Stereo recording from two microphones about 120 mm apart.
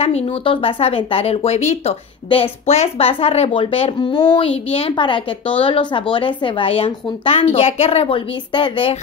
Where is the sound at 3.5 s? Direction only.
50° left (ahead or behind).